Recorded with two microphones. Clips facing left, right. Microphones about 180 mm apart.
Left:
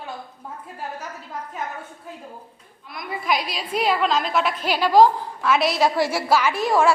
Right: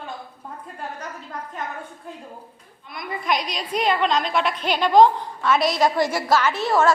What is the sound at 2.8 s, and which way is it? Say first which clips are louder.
A woman's voice: even; centre (ahead or behind).